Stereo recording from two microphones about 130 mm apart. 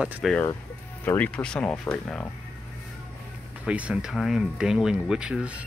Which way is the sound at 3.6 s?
10° right (ahead or behind).